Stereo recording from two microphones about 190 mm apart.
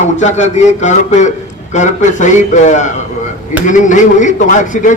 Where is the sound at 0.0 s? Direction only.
40° left (ahead or behind).